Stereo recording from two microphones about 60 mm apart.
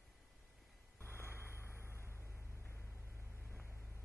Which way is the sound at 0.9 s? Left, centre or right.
Left.